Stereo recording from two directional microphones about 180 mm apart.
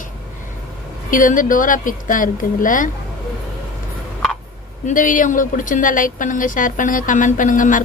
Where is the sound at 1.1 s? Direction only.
50° left (ahead or behind).